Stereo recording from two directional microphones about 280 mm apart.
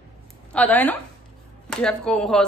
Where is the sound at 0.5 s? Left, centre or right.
Centre.